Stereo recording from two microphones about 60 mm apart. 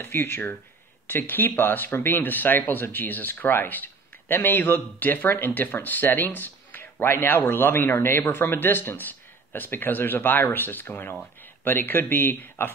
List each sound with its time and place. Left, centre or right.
0.0 s speech: left